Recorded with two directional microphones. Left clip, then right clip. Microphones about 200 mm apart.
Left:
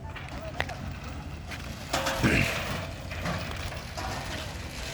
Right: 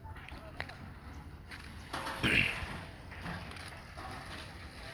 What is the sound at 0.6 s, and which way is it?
Vehicle, 5° right (ahead or behind).